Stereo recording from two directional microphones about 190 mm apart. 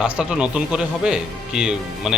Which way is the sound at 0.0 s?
5° right (ahead or behind).